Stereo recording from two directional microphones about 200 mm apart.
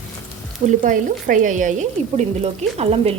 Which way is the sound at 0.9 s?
40° right (ahead or behind).